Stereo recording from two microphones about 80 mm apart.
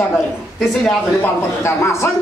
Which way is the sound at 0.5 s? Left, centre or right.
Centre.